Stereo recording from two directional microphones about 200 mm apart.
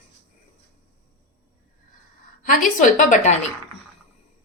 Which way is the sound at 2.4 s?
40° left (ahead or behind).